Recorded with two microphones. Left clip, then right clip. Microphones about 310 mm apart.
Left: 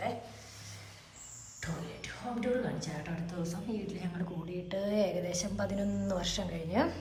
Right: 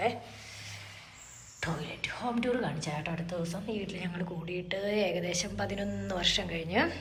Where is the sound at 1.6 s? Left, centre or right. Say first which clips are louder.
Right 7 dB; centre.